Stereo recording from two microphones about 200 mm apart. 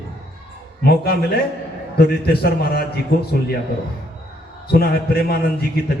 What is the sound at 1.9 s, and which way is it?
Speech, 50° left (ahead or behind).